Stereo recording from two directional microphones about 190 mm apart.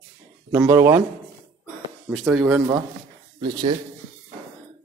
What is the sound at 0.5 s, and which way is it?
Speech, 15° right (ahead or behind).